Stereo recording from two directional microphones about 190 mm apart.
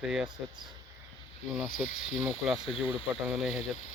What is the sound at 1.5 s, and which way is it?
Speech, 5° right (ahead or behind).